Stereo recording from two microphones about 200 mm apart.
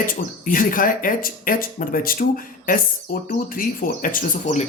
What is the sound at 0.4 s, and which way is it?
Speech, 45° left (ahead or behind).